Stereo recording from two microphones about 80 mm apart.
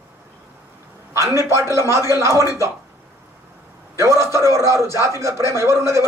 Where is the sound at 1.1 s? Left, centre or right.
Right.